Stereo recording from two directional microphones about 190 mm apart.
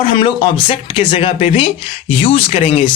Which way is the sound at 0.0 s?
25° left (ahead or behind).